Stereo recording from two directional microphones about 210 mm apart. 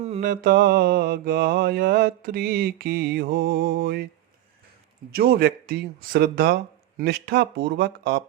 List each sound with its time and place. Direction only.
0.0 s mantra: 35° right (ahead or behind)
5.1 s mantra: 45° right (ahead or behind)